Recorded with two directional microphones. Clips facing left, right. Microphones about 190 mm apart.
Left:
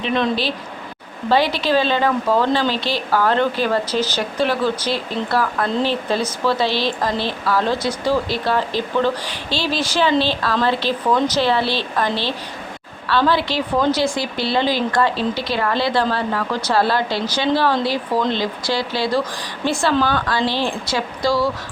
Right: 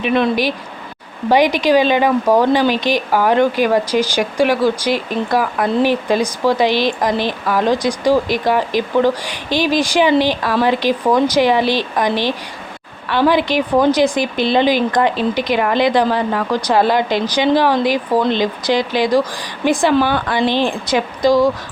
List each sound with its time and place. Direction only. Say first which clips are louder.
0.0 s speech: right 4 dB; 10° right (ahead or behind)